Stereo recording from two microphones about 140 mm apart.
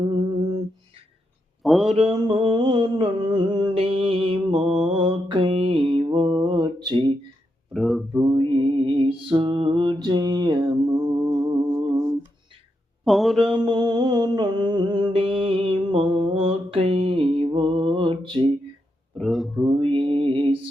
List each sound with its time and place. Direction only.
0.0 s humming: 35° right (ahead or behind)
1.6 s speech: centre (ahead or behind)
1.9 s a sound: 45° right (ahead or behind)
4.9 s mantra: 35° right (ahead or behind)
6.1 s a sound: 35° right (ahead or behind)
7.7 s speech: centre (ahead or behind)
8.1 s mantra: 35° right (ahead or behind)
13.1 s speech: centre (ahead or behind)
13.4 s music: 35° right (ahead or behind)
19.1 s speech: centre (ahead or behind)
19.6 s mantra: 40° right (ahead or behind)